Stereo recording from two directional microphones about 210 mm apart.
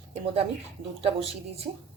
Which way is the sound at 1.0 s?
25° right (ahead or behind).